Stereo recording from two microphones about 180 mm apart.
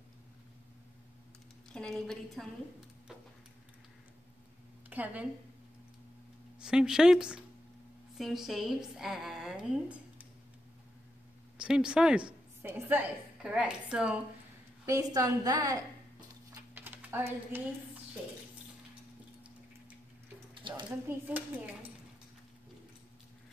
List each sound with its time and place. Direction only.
1.7 s a woman's voice: 5° left (ahead or behind)
4.8 s speech: 10° right (ahead or behind)
6.6 s a woman's voice: 5° right (ahead or behind)
11.5 s a woman's voice: 5° right (ahead or behind)
14.9 s a woman's voice: 20° right (ahead or behind)
16.7 s typing: 10° right (ahead or behind)
20.5 s a sound: 25° right (ahead or behind)
21.3 s speech: 10° right (ahead or behind)